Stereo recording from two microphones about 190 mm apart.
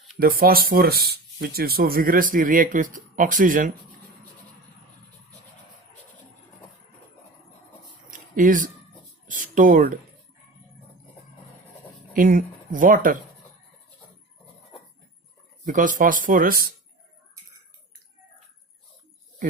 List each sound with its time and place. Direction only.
0.2 s speech: 50° right (ahead or behind)
8.4 s speech: 45° right (ahead or behind)
9.2 s a sound: 45° right (ahead or behind)
12.1 s speech: 45° right (ahead or behind)
15.6 s speech: 45° right (ahead or behind)